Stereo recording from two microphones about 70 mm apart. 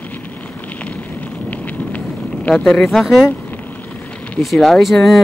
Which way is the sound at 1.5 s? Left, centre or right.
Left.